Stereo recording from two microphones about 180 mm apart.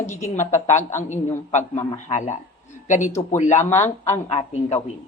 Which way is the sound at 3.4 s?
40° left (ahead or behind).